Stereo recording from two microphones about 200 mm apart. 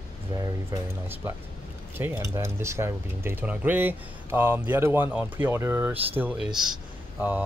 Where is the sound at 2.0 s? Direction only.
10° right (ahead or behind).